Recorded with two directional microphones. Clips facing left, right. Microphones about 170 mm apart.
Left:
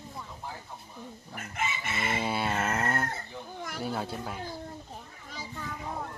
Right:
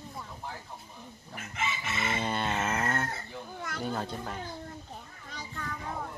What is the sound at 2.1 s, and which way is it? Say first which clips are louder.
Fowl: left 2 dB; 10° left (ahead or behind).